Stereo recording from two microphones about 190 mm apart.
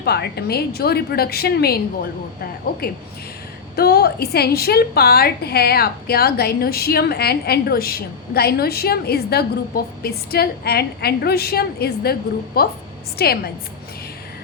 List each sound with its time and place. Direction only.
0.0 s a woman's voice: 60° left (ahead or behind)